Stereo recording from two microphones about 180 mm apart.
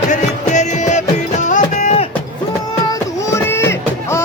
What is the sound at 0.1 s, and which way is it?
Music, 40° left (ahead or behind).